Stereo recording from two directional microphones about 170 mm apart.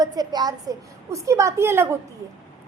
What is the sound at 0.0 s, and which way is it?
A child's voice, 25° right (ahead or behind).